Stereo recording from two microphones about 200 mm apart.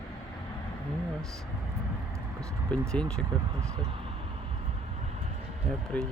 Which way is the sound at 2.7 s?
5° left (ahead or behind).